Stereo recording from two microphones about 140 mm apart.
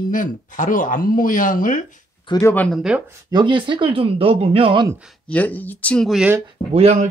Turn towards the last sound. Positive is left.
turn(degrees=-50)  # may be behind; listen again after turning